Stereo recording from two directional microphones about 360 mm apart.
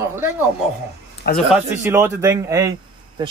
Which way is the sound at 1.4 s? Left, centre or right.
Centre.